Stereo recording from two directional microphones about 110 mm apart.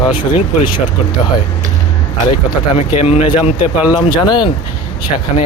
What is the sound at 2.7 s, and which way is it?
Speech, 60° left (ahead or behind).